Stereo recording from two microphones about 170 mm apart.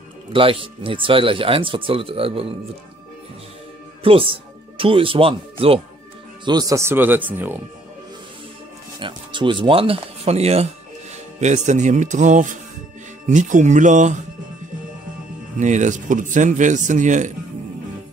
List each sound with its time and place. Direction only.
0.3 s speech: 30° right (ahead or behind)
4.0 s speech: 30° right (ahead or behind)
6.4 s speech: 20° right (ahead or behind)
9.0 s speech: 30° right (ahead or behind); by 14.1 s 45° right (ahead or behind)
15.6 s speech: 45° right (ahead or behind)